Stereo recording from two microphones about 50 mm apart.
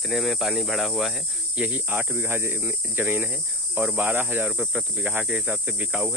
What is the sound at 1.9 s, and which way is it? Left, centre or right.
Speech, right.